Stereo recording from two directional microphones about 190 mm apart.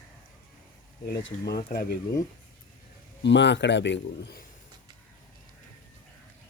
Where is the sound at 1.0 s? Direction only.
60° left (ahead or behind).